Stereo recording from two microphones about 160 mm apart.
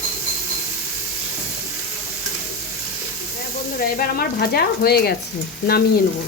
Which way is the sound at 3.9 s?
70° left (ahead or behind).